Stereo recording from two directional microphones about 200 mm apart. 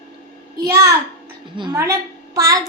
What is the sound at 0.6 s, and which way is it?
A child's voice, 15° right (ahead or behind).